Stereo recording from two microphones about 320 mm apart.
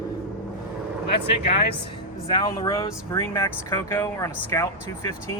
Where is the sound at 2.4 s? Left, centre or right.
Centre.